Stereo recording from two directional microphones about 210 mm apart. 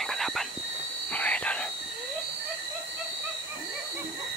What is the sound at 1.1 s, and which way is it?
Whispering, 5° left (ahead or behind).